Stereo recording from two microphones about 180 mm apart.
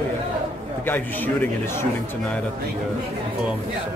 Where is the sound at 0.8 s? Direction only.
10° left (ahead or behind).